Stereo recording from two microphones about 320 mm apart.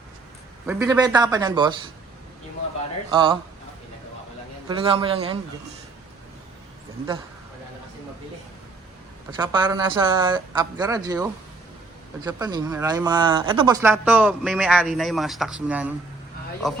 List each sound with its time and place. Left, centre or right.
0.7 s speech: centre
3.1 s speech: centre
4.7 s speech: centre
9.3 s speech: centre